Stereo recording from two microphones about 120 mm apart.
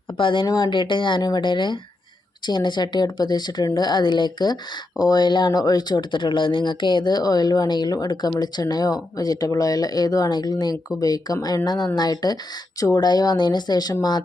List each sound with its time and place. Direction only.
0.2 s speech: 45° left (ahead or behind)